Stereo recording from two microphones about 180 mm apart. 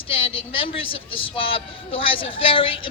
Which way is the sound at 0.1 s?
30° left (ahead or behind).